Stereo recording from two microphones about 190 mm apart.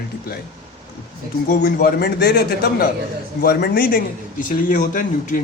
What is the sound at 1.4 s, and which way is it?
A man's voice, 45° left (ahead or behind).